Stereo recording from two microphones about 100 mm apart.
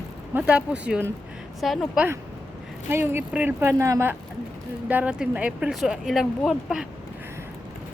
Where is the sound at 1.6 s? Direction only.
Centre (ahead or behind).